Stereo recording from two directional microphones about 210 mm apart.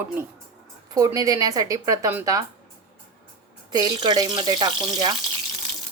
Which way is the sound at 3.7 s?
20° right (ahead or behind).